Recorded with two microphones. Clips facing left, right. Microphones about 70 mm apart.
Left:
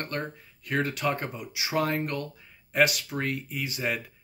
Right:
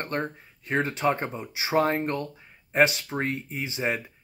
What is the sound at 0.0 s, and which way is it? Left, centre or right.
Speech, right.